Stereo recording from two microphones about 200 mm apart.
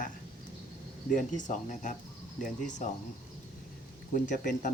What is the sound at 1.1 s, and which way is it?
Speech, 40° left (ahead or behind).